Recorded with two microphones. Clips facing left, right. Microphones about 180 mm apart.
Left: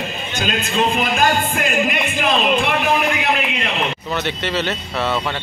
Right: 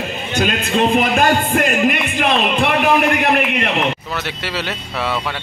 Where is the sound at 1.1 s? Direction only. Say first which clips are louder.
Right 3 dB; 55° right (ahead or behind).